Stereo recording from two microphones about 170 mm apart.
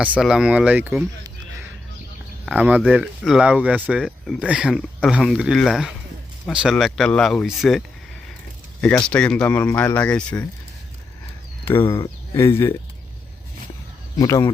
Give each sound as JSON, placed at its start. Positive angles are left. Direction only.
{"t": 0.0, "sound": "speech", "side_deg": -5}
{"t": 2.5, "sound": "speech", "side_deg": -10}
{"t": 11.6, "sound": "speech", "side_deg": 15}
{"t": 11.9, "sound": "speech", "side_deg": 30}
{"t": 12.4, "sound": "speech", "side_deg": 15}
{"t": 14.2, "sound": "speech", "side_deg": 20}